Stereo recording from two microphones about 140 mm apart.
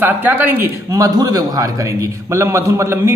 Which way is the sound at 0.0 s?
15° right (ahead or behind).